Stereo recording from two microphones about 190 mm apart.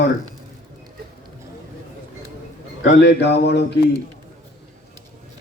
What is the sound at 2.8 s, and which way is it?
Speech, 70° left (ahead or behind).